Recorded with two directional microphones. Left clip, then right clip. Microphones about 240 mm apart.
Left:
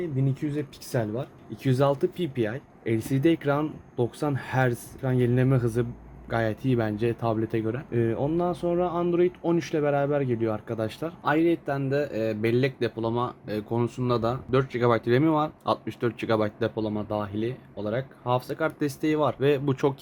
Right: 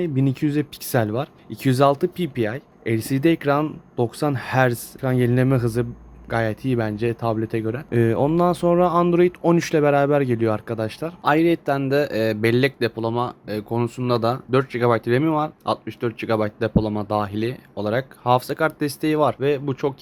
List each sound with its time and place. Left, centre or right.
0.0 s speech: right; by 7.8 s centre
7.9 s speech: right
19.5 s speech: centre